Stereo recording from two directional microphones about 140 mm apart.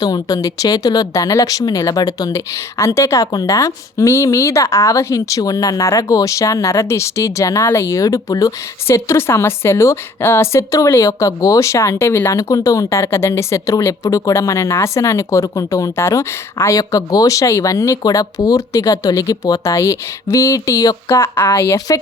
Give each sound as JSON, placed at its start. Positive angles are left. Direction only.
{"t": 0.0, "sound": "a woman's voice", "side_deg": 25}